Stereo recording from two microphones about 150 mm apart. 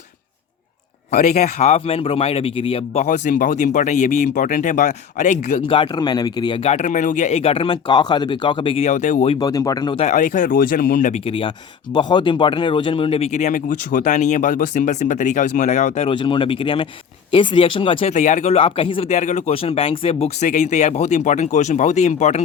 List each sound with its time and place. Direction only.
1.1 s speech: 55° left (ahead or behind)
3.1 s speech: 60° left (ahead or behind)
5.6 s speech: 35° left (ahead or behind)
6.7 s speech: 50° left (ahead or behind)
8.9 s speech: 55° left (ahead or behind)
9.4 s speech: 25° left (ahead or behind)
10.0 s speech: 55° left (ahead or behind)
11.3 s speech: 35° left (ahead or behind)
16.0 s speech: 35° left (ahead or behind)
18.1 s speech: 55° left (ahead or behind)